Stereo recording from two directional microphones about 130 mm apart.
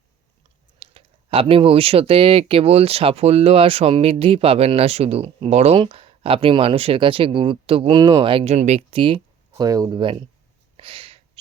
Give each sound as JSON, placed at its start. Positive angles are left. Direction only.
{"t": 0.8, "sound": "speech", "side_deg": -45}
{"t": 8.5, "sound": "speech", "side_deg": -55}
{"t": 9.0, "sound": "a sound", "side_deg": -40}
{"t": 9.6, "sound": "speech", "side_deg": -30}
{"t": 10.0, "sound": "speech", "side_deg": -40}
{"t": 10.8, "sound": "a sound", "side_deg": -45}